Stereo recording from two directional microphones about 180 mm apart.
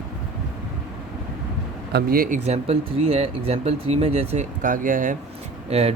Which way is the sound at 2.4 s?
35° right (ahead or behind).